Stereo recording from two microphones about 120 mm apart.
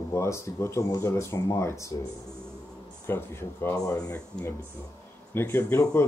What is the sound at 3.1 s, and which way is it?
Speech, 20° left (ahead or behind).